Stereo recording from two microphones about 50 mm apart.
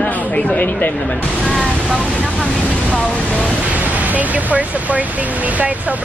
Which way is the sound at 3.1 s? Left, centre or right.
Left.